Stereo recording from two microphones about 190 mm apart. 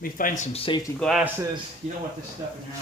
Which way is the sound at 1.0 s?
Centre (ahead or behind).